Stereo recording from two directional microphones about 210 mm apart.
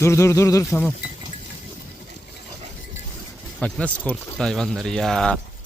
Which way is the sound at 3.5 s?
5° left (ahead or behind).